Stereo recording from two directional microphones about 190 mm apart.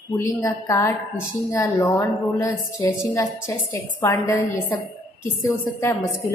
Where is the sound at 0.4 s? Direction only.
15° left (ahead or behind).